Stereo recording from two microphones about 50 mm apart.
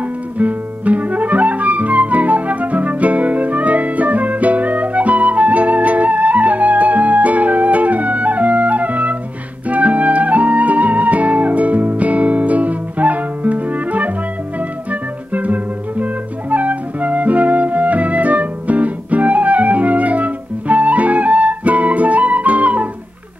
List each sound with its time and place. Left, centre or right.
0.4 s music: right